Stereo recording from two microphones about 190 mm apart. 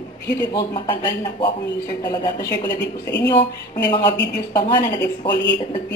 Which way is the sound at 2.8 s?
65° left (ahead or behind).